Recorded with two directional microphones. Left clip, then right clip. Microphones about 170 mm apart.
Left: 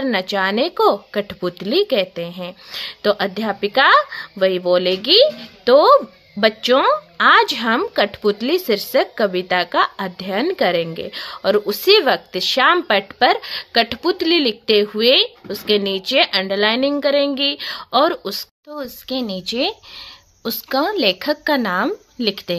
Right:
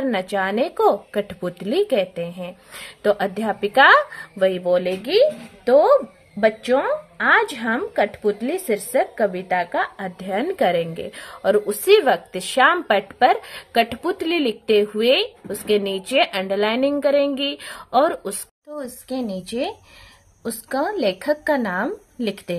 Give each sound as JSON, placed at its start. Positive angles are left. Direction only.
{"t": 0.0, "sound": "speech", "side_deg": 20}